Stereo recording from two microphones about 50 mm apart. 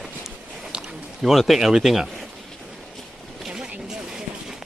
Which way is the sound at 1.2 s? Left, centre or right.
Centre.